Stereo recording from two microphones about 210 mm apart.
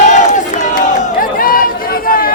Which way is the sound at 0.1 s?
35° left (ahead or behind).